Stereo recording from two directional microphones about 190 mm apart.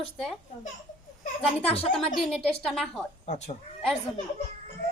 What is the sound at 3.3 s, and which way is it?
Speech, 35° left (ahead or behind).